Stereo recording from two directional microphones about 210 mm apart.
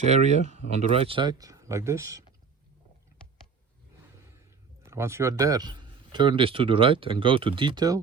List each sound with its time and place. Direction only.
0.0 s speech: 30° right (ahead or behind); by 2.2 s 15° right (ahead or behind)
4.9 s speech: 15° right (ahead or behind)